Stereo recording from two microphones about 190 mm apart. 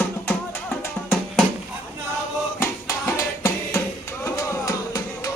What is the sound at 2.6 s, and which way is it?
Music, 15° left (ahead or behind).